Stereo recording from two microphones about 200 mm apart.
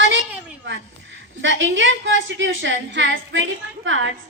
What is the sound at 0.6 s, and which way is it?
A woman's voice, 65° right (ahead or behind).